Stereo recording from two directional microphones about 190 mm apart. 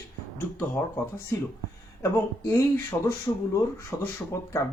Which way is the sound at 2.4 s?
15° left (ahead or behind).